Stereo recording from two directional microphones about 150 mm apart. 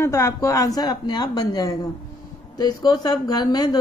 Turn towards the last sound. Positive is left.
turn(degrees=25)  # may be behind; listen again after turning